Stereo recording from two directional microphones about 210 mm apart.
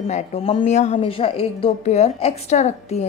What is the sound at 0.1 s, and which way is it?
A woman's voice, 25° left (ahead or behind).